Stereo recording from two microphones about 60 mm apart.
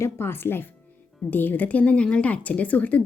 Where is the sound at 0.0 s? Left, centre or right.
Left.